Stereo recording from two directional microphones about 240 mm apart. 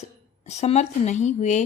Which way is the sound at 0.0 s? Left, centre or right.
Left.